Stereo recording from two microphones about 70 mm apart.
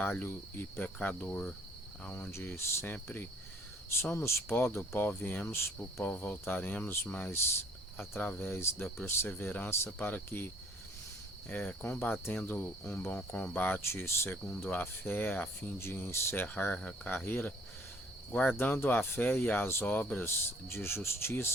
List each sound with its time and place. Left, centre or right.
0.0 s cricket: left
2.3 s cricket: left
4.0 s speech: left
5.0 s cricket: left
7.9 s speech: left
10.1 s cricket: left
13.1 s cricket: centre
13.8 s speech: left
14.6 s cricket: left
15.8 s speech: left
16.7 s cricket: left
18.3 s speech: left
18.5 s cricket: left
19.8 s speech: left